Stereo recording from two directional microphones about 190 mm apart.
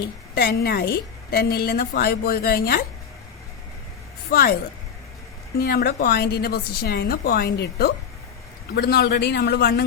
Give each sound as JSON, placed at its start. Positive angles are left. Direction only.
{"t": 0.3, "sound": "a woman's voice", "side_deg": 55}
{"t": 4.3, "sound": "a woman's voice", "side_deg": 55}
{"t": 5.5, "sound": "a woman's voice", "side_deg": 50}